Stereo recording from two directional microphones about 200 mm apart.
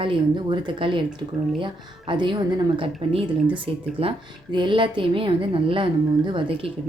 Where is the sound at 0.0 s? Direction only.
25° right (ahead or behind).